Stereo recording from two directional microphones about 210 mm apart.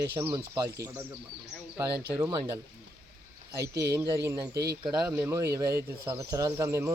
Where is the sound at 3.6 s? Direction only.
50° right (ahead or behind).